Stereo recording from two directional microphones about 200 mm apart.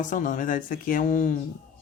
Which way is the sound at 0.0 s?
40° left (ahead or behind).